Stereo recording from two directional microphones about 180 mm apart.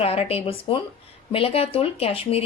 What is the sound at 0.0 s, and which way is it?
Speech, 35° left (ahead or behind).